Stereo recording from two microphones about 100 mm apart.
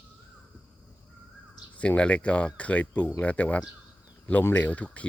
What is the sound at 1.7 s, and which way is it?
Speech, 15° left (ahead or behind).